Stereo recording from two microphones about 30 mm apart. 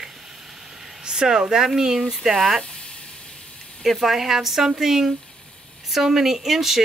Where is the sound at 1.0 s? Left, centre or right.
Right.